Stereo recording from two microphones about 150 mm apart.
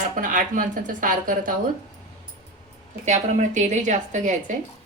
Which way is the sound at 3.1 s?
55° right (ahead or behind).